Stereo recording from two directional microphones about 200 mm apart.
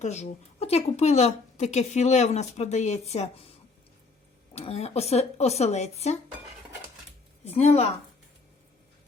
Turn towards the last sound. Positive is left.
turn(degrees=35)  # may be behind; listen again after turning